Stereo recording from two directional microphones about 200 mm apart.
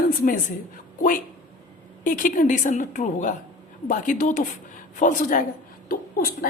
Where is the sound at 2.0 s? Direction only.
40° left (ahead or behind).